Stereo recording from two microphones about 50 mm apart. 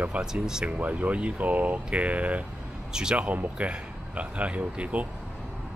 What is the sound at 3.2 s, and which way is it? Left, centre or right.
Speech, right.